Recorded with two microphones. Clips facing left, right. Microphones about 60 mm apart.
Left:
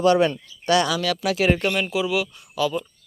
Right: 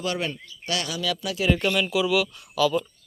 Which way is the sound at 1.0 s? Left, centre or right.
Left.